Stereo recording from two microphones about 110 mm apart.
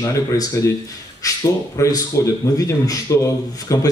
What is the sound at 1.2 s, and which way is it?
A man's voice, 30° left (ahead or behind).